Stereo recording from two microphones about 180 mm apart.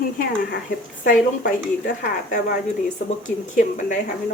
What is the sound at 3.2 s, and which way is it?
Speech, 45° left (ahead or behind).